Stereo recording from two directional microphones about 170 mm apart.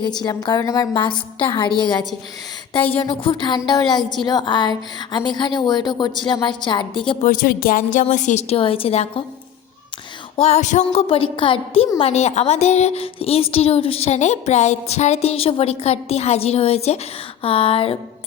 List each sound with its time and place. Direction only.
0.2 s speech: 25° left (ahead or behind)
3.1 s speech: 25° left (ahead or behind)
7.2 s a sound: 55° left (ahead or behind)
8.0 s a woman's voice: 45° left (ahead or behind)
10.3 s a woman's voice: 40° left (ahead or behind)